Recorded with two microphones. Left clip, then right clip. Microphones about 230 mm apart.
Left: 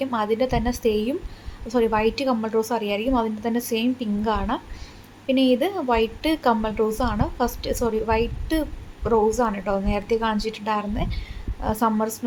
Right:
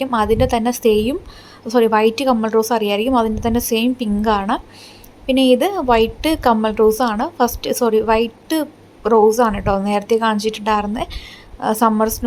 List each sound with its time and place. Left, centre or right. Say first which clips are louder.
0.0 s a woman's voice: right 7 dB; right